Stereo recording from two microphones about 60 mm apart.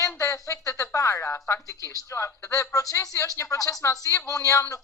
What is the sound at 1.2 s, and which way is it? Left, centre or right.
Speech, left.